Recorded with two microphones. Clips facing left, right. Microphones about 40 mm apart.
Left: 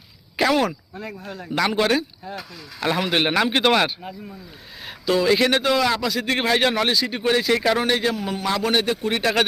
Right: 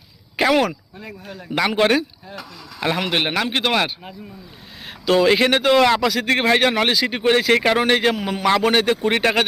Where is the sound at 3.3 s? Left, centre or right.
Centre.